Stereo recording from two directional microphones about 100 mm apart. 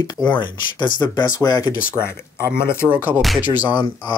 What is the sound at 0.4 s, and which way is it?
Speech, 45° left (ahead or behind).